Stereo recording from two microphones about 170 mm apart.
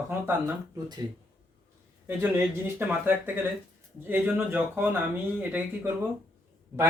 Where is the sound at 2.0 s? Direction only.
15° right (ahead or behind).